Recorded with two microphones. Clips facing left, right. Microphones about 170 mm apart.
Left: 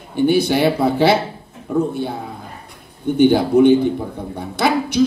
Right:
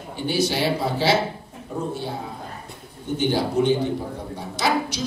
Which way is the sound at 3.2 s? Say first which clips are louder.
Left 9 dB; 60° left (ahead or behind).